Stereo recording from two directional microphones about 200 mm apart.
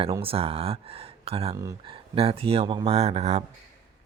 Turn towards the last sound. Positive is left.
turn(degrees=-30)  # may be behind; listen again after turning